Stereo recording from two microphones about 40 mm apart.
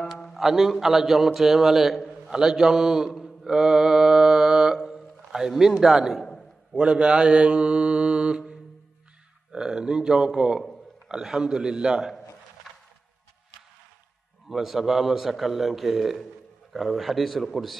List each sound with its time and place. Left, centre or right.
0.4 s a man's voice: centre
3.4 s mantra: centre
5.5 s a man's voice: centre
6.7 s mantra: right
9.5 s a man's voice: centre
14.5 s a man's voice: centre